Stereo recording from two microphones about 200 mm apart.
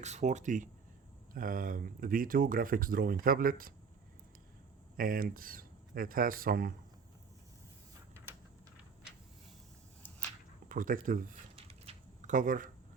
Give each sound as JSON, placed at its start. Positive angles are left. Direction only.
{"t": 0.0, "sound": "speech", "side_deg": -35}
{"t": 4.9, "sound": "speech", "side_deg": -45}
{"t": 8.1, "sound": "a sound", "side_deg": -10}
{"t": 10.7, "sound": "speech", "side_deg": -40}
{"t": 11.5, "sound": "typing", "side_deg": -30}